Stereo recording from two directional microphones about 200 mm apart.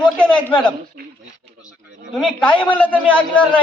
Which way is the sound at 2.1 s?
Centre (ahead or behind).